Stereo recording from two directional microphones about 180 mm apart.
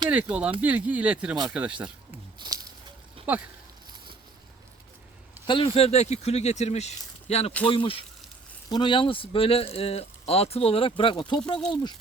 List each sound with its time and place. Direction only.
0.1 s speech: 10° right (ahead or behind)
2.4 s a sound: 25° right (ahead or behind)
3.3 s speech: 10° right (ahead or behind)
5.5 s speech: 30° left (ahead or behind)